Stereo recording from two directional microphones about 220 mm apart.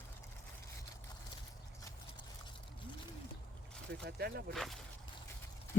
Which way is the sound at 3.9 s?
50° right (ahead or behind).